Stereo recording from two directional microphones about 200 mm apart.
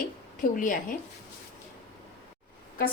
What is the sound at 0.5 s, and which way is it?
Speech, 40° left (ahead or behind).